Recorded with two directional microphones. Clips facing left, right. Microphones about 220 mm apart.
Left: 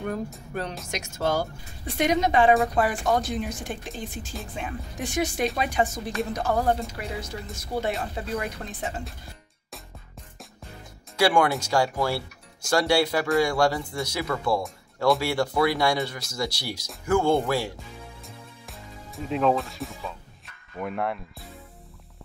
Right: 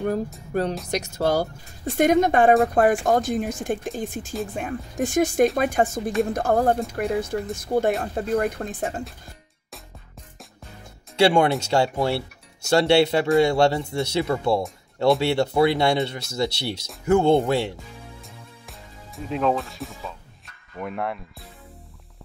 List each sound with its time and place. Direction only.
0.5 s speech: 40° right (ahead or behind)
2.0 s speech: 50° right (ahead or behind)
11.1 s speech: 25° right (ahead or behind)
18.2 s music: centre (ahead or behind)
20.7 s speech: centre (ahead or behind)